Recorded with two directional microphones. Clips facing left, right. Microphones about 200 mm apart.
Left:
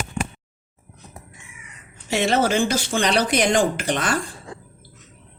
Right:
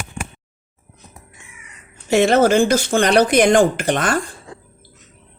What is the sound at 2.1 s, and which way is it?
Speech, 50° right (ahead or behind).